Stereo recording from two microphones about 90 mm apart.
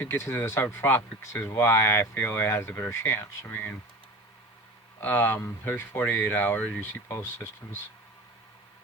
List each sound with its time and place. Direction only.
0.0 s speech: 30° left (ahead or behind)
4.9 s speech: 20° left (ahead or behind)